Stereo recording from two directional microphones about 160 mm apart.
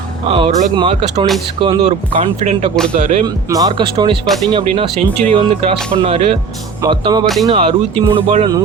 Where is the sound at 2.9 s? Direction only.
50° right (ahead or behind).